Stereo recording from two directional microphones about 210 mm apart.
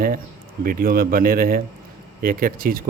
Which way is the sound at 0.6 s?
45° right (ahead or behind).